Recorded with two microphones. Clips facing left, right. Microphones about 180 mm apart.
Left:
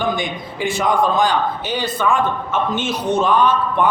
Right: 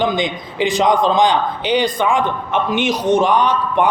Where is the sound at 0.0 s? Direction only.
20° right (ahead or behind).